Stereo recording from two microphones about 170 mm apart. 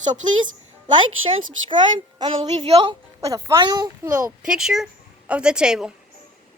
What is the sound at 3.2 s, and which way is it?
Speech, 20° right (ahead or behind).